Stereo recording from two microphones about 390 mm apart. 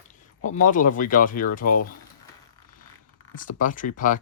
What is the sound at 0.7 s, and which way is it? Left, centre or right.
Speech, centre.